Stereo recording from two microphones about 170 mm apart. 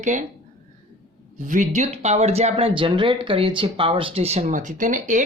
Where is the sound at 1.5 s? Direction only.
45° right (ahead or behind).